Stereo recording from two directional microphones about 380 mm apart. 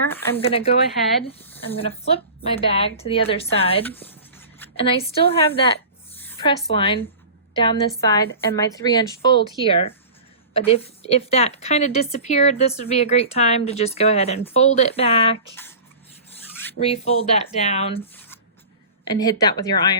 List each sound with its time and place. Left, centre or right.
0.0 s a woman's voice: centre
6.1 s a woman's voice: centre
16.7 s a woman's voice: centre